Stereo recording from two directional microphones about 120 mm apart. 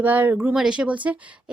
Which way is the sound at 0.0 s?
15° right (ahead or behind).